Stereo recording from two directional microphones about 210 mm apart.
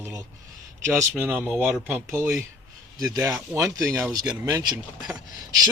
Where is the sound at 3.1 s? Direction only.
15° right (ahead or behind).